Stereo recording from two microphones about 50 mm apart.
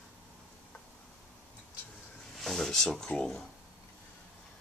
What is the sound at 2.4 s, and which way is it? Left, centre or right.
Speech, centre.